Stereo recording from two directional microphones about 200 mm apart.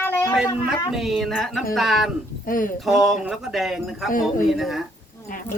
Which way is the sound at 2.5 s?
45° left (ahead or behind).